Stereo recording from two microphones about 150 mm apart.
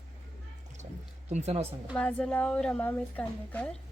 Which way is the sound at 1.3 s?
50° right (ahead or behind).